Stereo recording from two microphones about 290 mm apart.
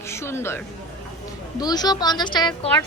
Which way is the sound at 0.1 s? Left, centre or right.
Centre.